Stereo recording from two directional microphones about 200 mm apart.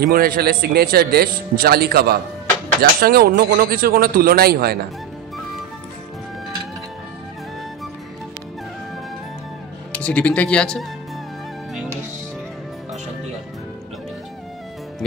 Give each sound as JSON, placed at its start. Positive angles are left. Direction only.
{"t": 0.0, "sound": "a man's voice", "side_deg": -50}
{"t": 9.9, "sound": "speech", "side_deg": 5}